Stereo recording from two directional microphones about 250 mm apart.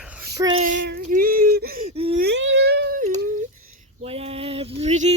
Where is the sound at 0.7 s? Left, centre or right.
Right.